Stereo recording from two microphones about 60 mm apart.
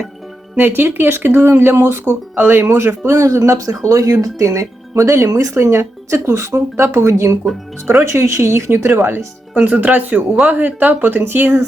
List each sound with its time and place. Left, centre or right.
0.5 s speech: right
3.8 s speech: right
9.6 s speech: right